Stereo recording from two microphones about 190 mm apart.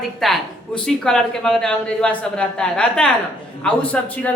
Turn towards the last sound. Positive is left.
turn(degrees=5)  # may be behind; listen again after turning